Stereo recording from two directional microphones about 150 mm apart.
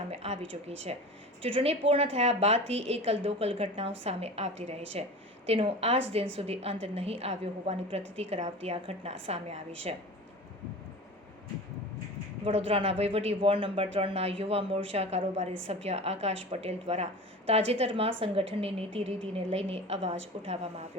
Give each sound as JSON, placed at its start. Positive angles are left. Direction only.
{"t": 0.1, "sound": "a man's voice", "side_deg": -45}
{"t": 12.5, "sound": "a man's voice", "side_deg": -40}